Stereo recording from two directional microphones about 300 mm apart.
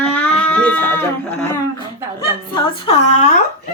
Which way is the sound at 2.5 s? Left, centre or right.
Centre.